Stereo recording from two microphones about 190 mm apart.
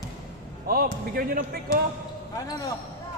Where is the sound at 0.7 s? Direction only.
50° right (ahead or behind).